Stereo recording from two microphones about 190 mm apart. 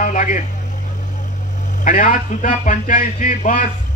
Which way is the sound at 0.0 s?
45° left (ahead or behind).